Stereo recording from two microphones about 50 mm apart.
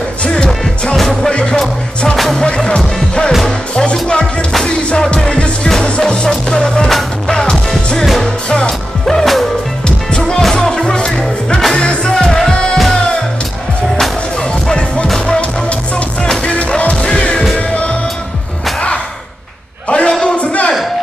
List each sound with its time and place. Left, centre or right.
0.2 s music: centre
9.8 s music: centre
14.7 s music: left
16.4 s music: left
19.9 s a sound: left